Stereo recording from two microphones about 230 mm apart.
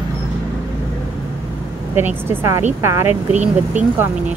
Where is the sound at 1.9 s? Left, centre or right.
Centre.